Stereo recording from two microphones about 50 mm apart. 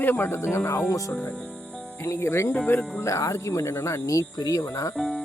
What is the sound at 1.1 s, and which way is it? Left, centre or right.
Speech, left.